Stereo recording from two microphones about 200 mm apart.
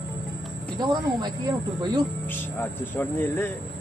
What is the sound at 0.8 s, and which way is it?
Speech, 20° right (ahead or behind).